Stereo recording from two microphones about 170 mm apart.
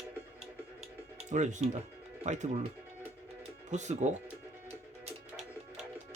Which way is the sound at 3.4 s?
45° right (ahead or behind).